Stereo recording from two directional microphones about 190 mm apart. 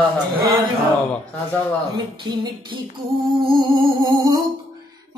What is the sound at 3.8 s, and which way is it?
Music, 25° right (ahead or behind).